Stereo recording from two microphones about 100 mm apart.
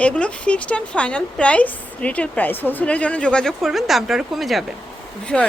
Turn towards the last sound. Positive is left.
turn(degrees=10)  # may be behind; listen again after turning